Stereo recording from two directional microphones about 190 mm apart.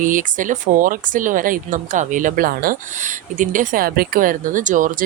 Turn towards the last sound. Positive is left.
turn(degrees=-45)  # may be behind; listen again after turning